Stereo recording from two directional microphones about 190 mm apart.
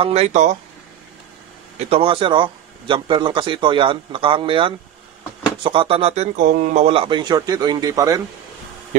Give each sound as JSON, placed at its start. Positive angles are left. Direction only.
{"t": 0.0, "sound": "speech", "side_deg": -30}
{"t": 1.8, "sound": "speech", "side_deg": -30}